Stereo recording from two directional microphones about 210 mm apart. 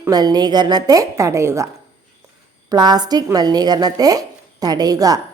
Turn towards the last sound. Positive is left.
turn(degrees=-15)  # may be behind; listen again after turning